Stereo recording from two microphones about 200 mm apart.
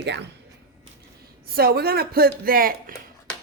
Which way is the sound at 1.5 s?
50° right (ahead or behind).